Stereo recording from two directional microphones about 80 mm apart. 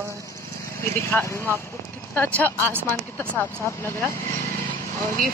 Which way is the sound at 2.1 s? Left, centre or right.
Centre.